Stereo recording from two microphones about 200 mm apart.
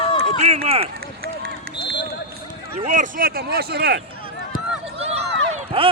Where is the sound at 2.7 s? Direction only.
35° right (ahead or behind); by 4.0 s 55° right (ahead or behind).